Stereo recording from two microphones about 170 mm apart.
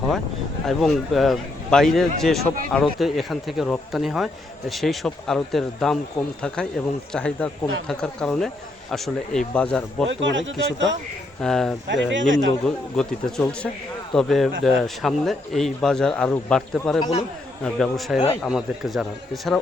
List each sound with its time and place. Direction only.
0.6 s speech: centre (ahead or behind)
10.1 s speech: 90° right
11.3 s speech: 5° left (ahead or behind)
11.9 s speech: 90° right
12.6 s speech: 5° left (ahead or behind)
17.0 s speech: 35° left (ahead or behind)
17.6 s speech: 5° left (ahead or behind)